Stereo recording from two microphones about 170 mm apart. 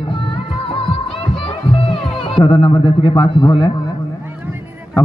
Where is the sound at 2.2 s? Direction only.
30° left (ahead or behind).